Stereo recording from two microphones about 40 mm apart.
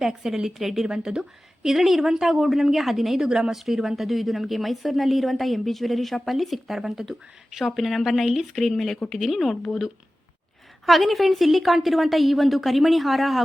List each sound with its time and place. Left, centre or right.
0.0 s a woman's voice: centre
3.2 s speech: centre
3.5 s a woman's voice: centre
8.5 s a woman's voice: centre
10.8 s a woman's voice: centre